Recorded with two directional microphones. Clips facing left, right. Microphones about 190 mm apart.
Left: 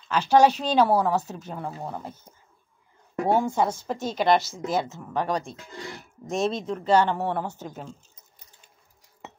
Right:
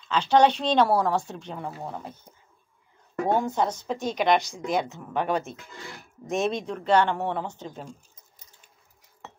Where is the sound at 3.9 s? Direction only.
15° right (ahead or behind); by 7.8 s 10° left (ahead or behind).